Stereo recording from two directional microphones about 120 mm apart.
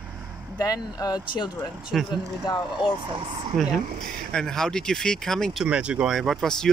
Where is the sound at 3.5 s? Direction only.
Centre (ahead or behind).